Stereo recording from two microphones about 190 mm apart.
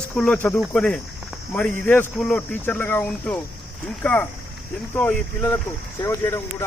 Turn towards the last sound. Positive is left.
turn(degrees=15)  # may be behind; listen again after turning